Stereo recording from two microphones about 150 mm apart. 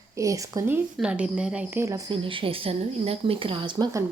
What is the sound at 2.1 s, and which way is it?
A woman's voice, 35° right (ahead or behind).